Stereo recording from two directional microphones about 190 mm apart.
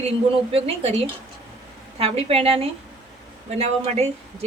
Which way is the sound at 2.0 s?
30° right (ahead or behind).